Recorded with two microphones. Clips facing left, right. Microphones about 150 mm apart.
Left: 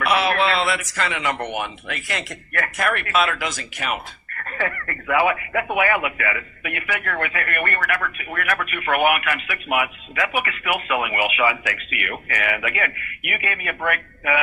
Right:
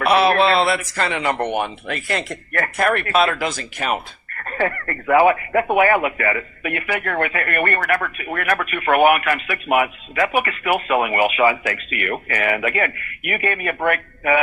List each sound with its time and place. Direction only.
0.0 s speech: 35° right (ahead or behind)